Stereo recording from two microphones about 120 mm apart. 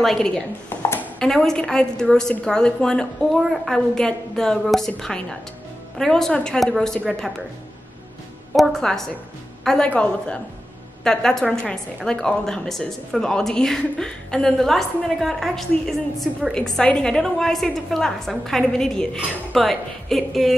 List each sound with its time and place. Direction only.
0.0 s a woman's voice: 5° left (ahead or behind)
0.7 s a sound: 20° left (ahead or behind)
1.2 s a woman's voice: 5° left (ahead or behind)
8.5 s a woman's voice: centre (ahead or behind)